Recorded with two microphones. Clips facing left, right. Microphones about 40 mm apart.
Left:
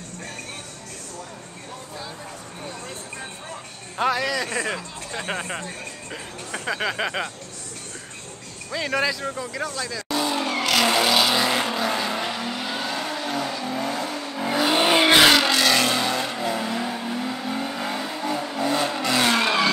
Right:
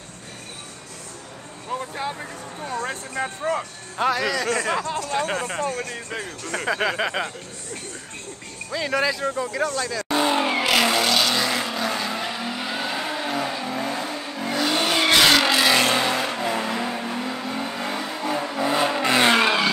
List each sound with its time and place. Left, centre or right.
2.7 s speech: right
3.9 s speech: centre
4.7 s speech: right
5.2 s speech: centre
6.6 s speech: centre
8.7 s speech: centre
9.1 s speech: centre
10.0 s vehicle: right; by 10.9 s centre
10.9 s vehicle: centre
14.4 s vehicle: centre
15.3 s vehicle: centre; by 19.4 s right
19.4 s vehicle: centre